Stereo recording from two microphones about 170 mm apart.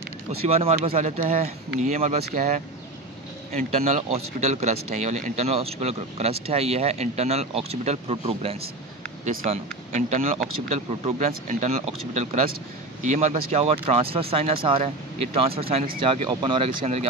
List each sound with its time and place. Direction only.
0.3 s a man's voice: 35° right (ahead or behind)
3.5 s a man's voice: 40° right (ahead or behind)
9.2 s speech: 55° right (ahead or behind)
9.5 s a man's voice: 45° right (ahead or behind)